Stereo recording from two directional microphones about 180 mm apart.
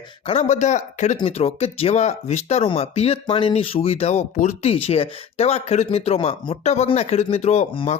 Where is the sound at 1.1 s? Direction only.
30° left (ahead or behind).